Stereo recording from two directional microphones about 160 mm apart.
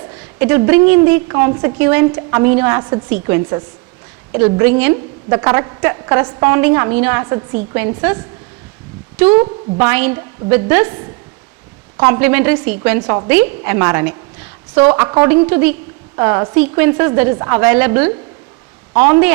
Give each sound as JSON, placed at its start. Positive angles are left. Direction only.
{"t": 0.1, "sound": "a woman's voice", "side_deg": -15}